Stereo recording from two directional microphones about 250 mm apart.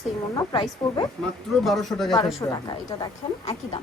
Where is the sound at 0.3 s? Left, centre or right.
Centre.